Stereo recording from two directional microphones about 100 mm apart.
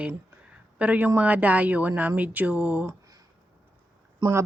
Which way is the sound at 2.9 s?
35° right (ahead or behind).